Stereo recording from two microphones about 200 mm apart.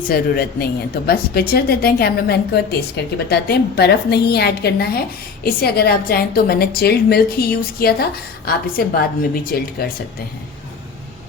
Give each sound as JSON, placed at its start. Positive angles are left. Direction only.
{"t": 0.0, "sound": "a woman's voice", "side_deg": 50}